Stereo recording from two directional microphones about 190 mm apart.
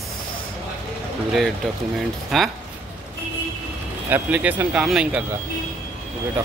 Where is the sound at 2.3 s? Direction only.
Centre (ahead or behind).